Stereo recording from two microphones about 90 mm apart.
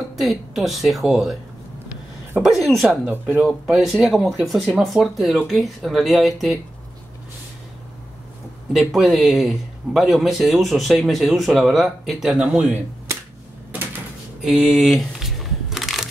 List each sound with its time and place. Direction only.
0.2 s speech: centre (ahead or behind)
2.4 s speech: 5° right (ahead or behind)
2.9 s speech: 20° right (ahead or behind)
3.6 s speech: 5° right (ahead or behind)
8.7 s speech: centre (ahead or behind)
14.4 s a sound: 5° right (ahead or behind)